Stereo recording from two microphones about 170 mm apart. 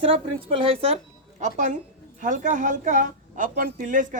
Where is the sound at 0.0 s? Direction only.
35° right (ahead or behind).